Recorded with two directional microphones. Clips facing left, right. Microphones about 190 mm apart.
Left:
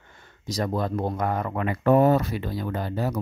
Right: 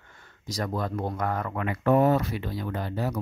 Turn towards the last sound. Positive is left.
turn(degrees=40)  # may be behind; listen again after turning